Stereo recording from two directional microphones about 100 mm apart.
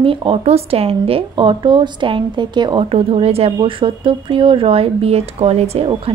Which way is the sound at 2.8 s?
80° right.